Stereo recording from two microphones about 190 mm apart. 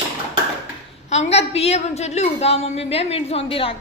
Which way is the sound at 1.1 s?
35° left (ahead or behind).